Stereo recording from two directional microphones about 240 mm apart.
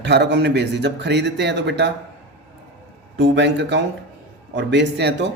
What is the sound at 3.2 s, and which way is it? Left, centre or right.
Speech, right.